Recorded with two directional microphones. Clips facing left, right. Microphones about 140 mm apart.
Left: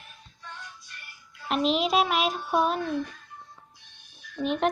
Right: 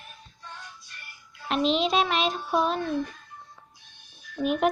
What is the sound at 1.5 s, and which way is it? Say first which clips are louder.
Music: even; 5° left (ahead or behind).